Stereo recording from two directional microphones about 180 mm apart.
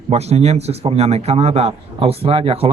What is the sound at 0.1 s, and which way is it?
A man's voice, 35° right (ahead or behind).